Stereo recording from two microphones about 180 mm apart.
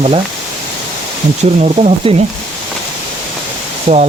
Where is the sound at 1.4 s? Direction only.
35° right (ahead or behind).